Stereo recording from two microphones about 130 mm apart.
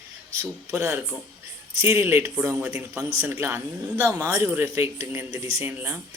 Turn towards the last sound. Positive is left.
turn(degrees=-15)  # may be behind; listen again after turning